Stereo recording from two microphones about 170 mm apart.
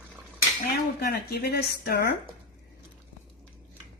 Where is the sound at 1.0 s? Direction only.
65° left (ahead or behind).